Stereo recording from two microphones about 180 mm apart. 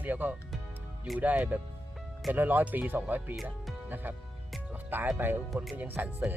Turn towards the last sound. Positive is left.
turn(degrees=-10)  # may be behind; listen again after turning